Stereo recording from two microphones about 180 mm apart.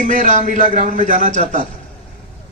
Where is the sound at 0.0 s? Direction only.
45° right (ahead or behind).